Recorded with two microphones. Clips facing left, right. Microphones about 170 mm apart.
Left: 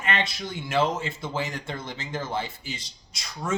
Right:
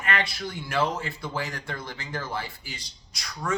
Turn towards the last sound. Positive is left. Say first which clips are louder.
# even
turn(degrees=25)  # may be behind; listen again after turning